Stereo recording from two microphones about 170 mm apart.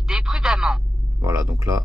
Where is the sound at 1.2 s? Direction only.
20° right (ahead or behind).